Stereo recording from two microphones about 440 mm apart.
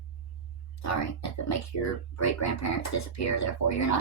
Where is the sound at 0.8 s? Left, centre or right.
Left.